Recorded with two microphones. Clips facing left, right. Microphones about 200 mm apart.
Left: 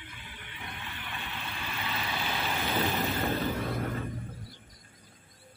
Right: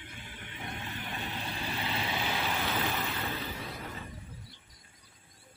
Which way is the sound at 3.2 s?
50° left (ahead or behind).